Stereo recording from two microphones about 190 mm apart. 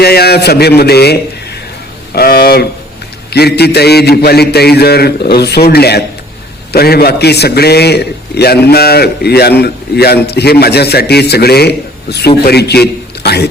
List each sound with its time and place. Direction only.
0.0 s a man's voice: 55° left (ahead or behind)